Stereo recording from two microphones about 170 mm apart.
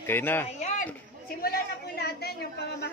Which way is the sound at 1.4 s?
65° left (ahead or behind).